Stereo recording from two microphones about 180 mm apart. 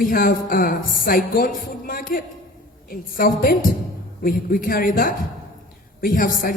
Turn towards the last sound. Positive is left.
turn(degrees=50)  # may be behind; listen again after turning